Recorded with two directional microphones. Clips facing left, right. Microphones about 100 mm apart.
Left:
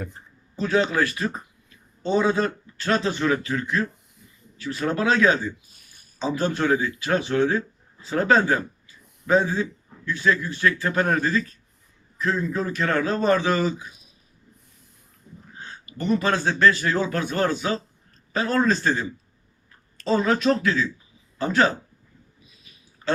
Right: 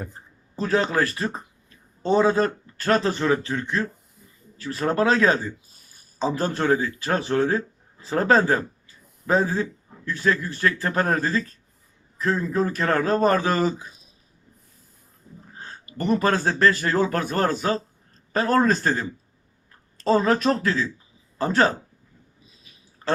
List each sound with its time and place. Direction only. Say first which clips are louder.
0.0 s a man's voice: left 1 dB; 40° right (ahead or behind)
15.5 s speech: right 2 dB; 40° right (ahead or behind)
20.1 s a man's voice: right 1 dB; 40° right (ahead or behind)